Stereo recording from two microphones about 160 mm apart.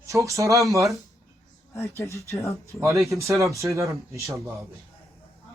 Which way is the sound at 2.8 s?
20° right (ahead or behind).